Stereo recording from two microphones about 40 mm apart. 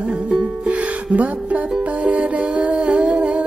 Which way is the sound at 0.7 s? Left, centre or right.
Right.